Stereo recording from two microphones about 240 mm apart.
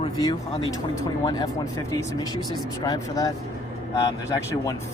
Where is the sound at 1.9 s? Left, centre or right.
Centre.